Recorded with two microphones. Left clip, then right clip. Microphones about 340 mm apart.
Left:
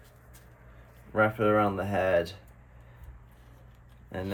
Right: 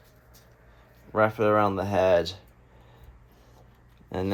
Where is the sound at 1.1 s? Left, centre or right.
Centre.